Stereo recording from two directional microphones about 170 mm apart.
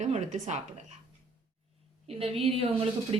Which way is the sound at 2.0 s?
35° right (ahead or behind).